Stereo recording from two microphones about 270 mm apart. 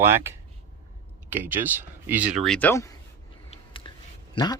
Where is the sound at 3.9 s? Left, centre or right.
Centre.